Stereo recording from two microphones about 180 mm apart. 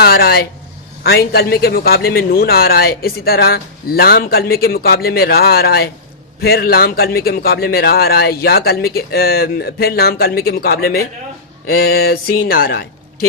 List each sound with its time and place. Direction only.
0.0 s a man's voice: 60° left (ahead or behind)